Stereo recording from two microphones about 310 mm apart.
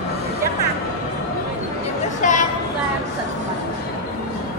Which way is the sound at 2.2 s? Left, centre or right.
Left.